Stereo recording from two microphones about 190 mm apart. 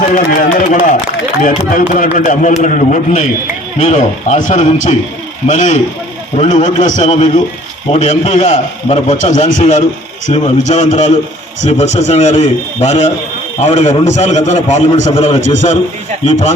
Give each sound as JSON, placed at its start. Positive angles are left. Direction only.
{"t": 0.0, "sound": "speech", "side_deg": 45}